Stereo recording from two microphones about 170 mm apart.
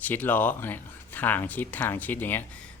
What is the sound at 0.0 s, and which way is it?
Speech, 10° left (ahead or behind).